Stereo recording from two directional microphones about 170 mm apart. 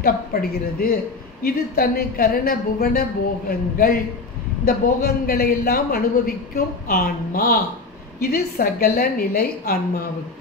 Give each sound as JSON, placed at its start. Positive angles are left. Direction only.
{"t": 0.0, "sound": "a man's voice", "side_deg": 60}